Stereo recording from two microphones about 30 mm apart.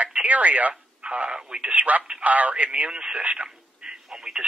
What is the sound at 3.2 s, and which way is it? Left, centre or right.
Speech, right.